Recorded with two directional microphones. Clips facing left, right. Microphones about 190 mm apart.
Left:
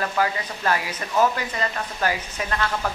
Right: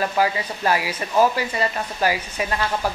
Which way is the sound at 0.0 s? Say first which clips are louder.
Right 3 dB; 15° right (ahead or behind).